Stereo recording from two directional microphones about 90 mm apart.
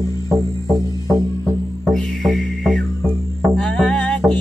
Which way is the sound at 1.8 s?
Centre (ahead or behind).